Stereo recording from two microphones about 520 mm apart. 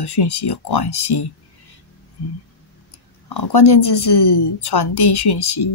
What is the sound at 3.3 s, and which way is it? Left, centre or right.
Speech, left.